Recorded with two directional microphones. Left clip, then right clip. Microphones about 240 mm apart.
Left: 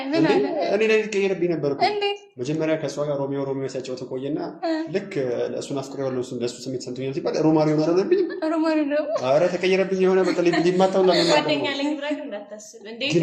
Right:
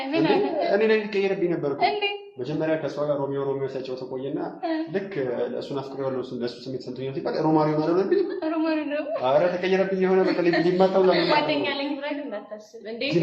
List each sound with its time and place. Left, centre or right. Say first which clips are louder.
0.1 s a woman's voice: left 2 dB; left
4.4 s a woman's voice: left 1 dB; left